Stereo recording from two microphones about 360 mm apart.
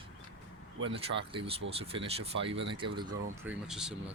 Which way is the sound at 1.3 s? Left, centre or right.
Centre.